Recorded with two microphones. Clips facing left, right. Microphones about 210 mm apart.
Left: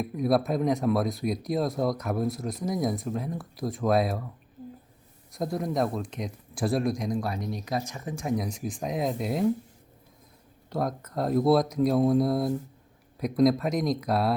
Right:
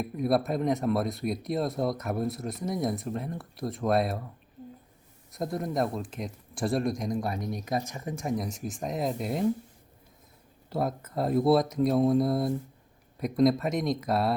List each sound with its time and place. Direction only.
0.0 s speech: centre (ahead or behind)
5.3 s speech: centre (ahead or behind)
7.7 s speech: 15° right (ahead or behind)
8.0 s speech: centre (ahead or behind)
10.7 s speech: 5° right (ahead or behind)